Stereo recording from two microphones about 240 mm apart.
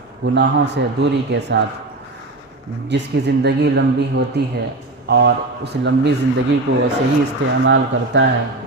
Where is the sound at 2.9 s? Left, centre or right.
Right.